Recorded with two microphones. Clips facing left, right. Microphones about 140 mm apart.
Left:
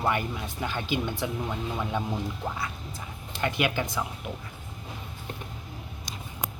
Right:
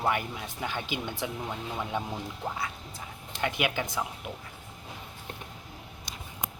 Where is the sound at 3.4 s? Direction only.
15° right (ahead or behind).